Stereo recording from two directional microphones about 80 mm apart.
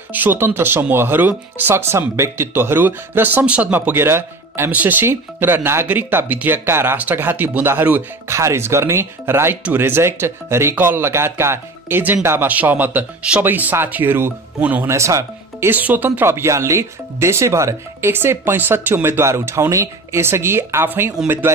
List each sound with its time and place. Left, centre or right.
0.1 s speech: right
3.9 s a man's voice: right
4.6 s speech: right
8.3 s speech: right
14.9 s speech: right
15.7 s speech: right
18.1 s speech: right